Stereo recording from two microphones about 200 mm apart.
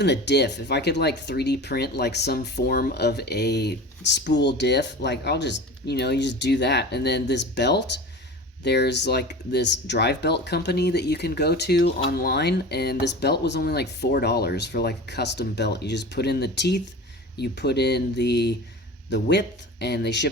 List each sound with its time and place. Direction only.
0.0 s speech: 60° left (ahead or behind)
12.1 s speech: 50° left (ahead or behind)